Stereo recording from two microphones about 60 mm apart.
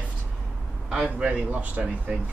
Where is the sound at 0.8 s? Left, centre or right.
Centre.